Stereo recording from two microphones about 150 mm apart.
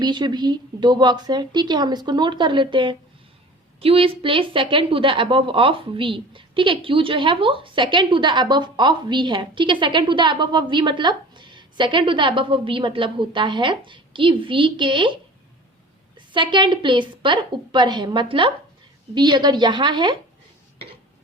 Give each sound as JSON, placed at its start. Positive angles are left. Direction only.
{"t": 0.0, "sound": "a woman's voice", "side_deg": -30}
{"t": 16.3, "sound": "speech", "side_deg": -35}